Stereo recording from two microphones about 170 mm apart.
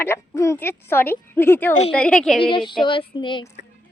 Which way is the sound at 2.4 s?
30° left (ahead or behind).